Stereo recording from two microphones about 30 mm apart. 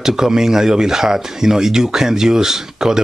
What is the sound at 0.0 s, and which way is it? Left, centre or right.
Speech, centre.